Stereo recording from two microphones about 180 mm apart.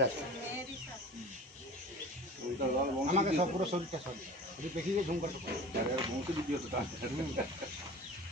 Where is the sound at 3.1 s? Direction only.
35° right (ahead or behind).